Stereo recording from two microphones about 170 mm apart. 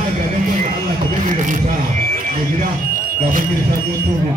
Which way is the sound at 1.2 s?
50° right (ahead or behind).